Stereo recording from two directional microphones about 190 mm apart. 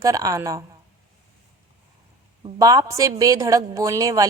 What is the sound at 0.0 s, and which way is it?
Speech, 15° right (ahead or behind).